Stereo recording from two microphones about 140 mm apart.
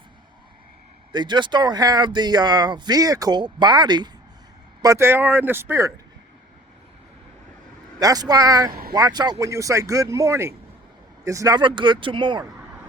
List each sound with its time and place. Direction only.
1.1 s speech: 30° right (ahead or behind)
4.8 s speech: 20° right (ahead or behind)
7.9 s speech: 25° right (ahead or behind)